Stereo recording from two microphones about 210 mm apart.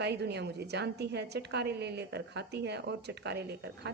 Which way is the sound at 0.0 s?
55° right (ahead or behind).